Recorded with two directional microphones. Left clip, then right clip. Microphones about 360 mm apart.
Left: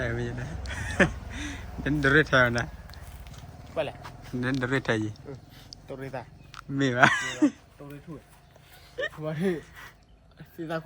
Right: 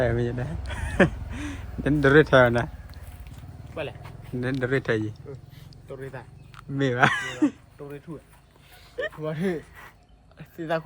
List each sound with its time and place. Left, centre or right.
0.0 s speech: centre
3.8 s a sound: left
4.4 s speech: centre
5.9 s speech: left
6.5 s speech: centre
9.0 s speech: centre